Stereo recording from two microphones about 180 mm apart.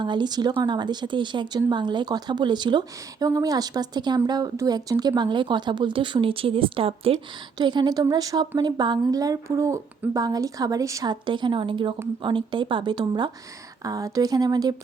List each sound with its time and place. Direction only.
0.0 s speech: 25° right (ahead or behind)